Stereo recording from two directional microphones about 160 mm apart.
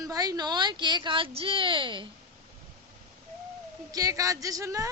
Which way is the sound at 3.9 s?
20° right (ahead or behind).